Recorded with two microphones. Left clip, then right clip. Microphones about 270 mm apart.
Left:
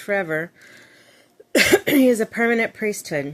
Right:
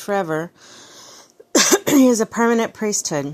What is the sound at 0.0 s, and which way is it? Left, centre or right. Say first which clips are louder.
Speech: right 1 dB; right.